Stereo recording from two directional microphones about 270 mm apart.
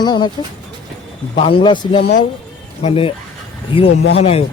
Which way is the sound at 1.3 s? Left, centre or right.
Left.